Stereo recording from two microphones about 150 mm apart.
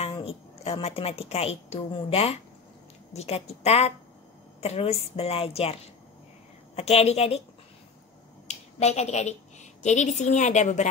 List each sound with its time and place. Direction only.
0.0 s a woman's voice: 40° left (ahead or behind)
8.5 s a woman's voice: 45° left (ahead or behind)